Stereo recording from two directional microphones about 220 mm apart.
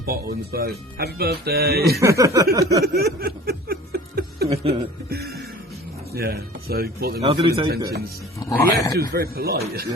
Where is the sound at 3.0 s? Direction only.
45° right (ahead or behind).